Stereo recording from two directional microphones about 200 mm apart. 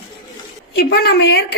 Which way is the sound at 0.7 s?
50° left (ahead or behind).